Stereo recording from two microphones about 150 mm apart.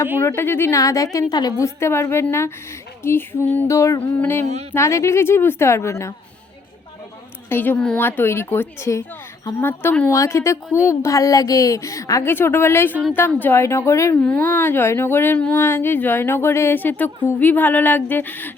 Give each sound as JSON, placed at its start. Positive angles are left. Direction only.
{"t": 0.2, "sound": "speech", "side_deg": 15}
{"t": 7.5, "sound": "speech", "side_deg": 15}